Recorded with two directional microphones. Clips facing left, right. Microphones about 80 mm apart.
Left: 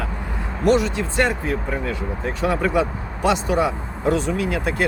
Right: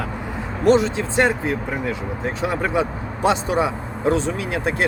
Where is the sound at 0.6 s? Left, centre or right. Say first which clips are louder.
Right 2 dB; right.